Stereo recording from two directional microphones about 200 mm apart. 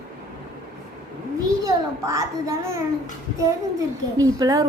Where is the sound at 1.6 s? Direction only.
15° right (ahead or behind).